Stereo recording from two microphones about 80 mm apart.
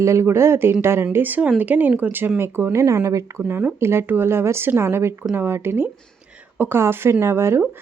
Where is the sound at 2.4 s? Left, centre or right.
Right.